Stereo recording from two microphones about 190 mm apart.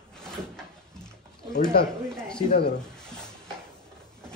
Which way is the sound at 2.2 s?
5° left (ahead or behind).